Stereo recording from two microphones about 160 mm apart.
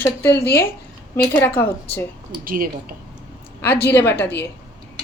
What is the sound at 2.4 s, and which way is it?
Speech, 60° right (ahead or behind).